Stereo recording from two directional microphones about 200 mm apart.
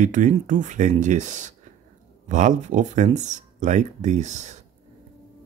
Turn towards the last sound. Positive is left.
turn(degrees=-35)  # may be behind; listen again after turning